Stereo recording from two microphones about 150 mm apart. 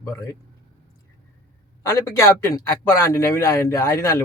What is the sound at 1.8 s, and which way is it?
A man's voice, 20° left (ahead or behind).